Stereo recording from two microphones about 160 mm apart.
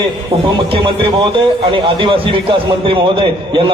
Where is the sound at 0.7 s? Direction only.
35° right (ahead or behind).